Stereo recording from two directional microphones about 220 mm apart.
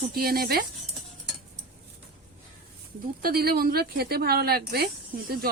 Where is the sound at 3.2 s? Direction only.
45° right (ahead or behind).